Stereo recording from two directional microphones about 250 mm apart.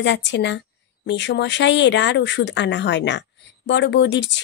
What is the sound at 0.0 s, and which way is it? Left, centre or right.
Speech, left.